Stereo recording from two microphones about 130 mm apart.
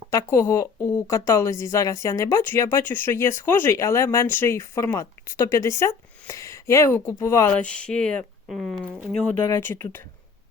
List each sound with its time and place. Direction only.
0.1 s speech: 20° left (ahead or behind)
7.5 s speech: 10° left (ahead or behind)
9.4 s speech: 20° left (ahead or behind)